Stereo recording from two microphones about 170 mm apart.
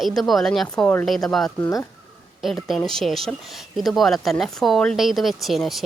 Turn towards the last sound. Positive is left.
turn(degrees=0)  # may be behind; listen again after turning